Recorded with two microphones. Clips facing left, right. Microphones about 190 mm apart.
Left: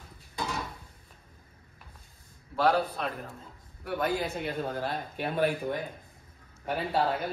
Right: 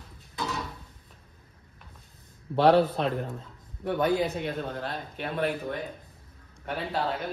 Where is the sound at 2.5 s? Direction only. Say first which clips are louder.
Right 6 dB; 30° right (ahead or behind).